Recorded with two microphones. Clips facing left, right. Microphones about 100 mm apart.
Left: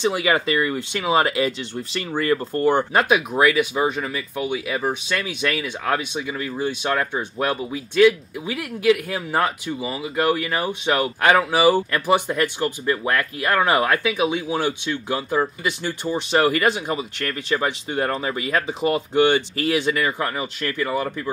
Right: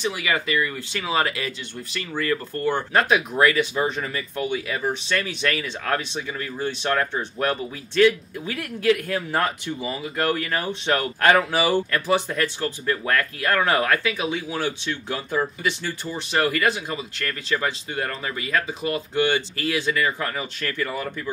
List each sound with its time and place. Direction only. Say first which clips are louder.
0.0 s speech: left 5 dB; 25° left (ahead or behind)
2.9 s speech: left 1 dB; 10° left (ahead or behind)